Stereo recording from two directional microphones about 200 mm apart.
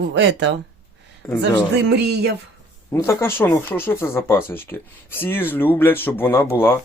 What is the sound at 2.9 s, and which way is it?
Speech, 15° left (ahead or behind).